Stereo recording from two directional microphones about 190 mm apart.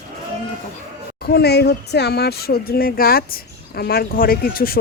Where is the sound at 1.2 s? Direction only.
55° left (ahead or behind).